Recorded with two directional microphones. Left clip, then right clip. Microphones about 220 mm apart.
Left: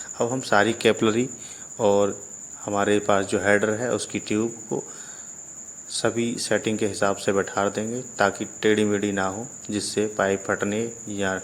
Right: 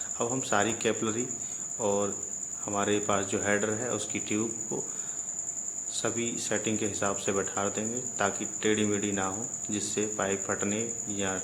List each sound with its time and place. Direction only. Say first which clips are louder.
0.2 s speech: left 8 dB; 25° left (ahead or behind)
1.8 s cricket: left 9 dB; 30° left (ahead or behind)
2.6 s speech: left 7 dB; 25° left (ahead or behind)
6.0 s speech: left 8 dB; 25° left (ahead or behind)